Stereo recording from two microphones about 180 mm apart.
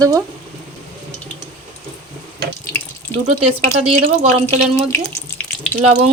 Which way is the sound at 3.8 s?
35° right (ahead or behind).